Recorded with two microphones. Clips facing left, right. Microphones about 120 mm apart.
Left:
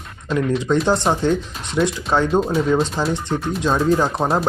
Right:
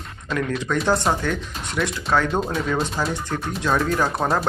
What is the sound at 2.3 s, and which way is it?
Speech, 5° left (ahead or behind).